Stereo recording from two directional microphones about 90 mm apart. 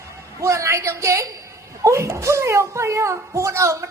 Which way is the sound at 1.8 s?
35° right (ahead or behind).